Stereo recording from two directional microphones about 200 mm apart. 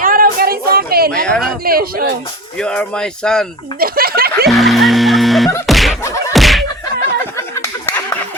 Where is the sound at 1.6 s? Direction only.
50° right (ahead or behind).